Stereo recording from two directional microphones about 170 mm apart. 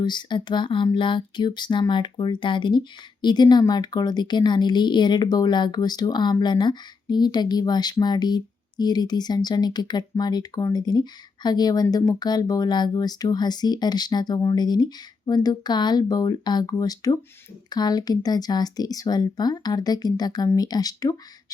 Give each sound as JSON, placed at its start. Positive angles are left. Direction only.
{"t": 0.0, "sound": "speech", "side_deg": 25}